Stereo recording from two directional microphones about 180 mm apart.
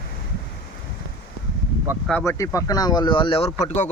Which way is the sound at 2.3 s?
15° left (ahead or behind).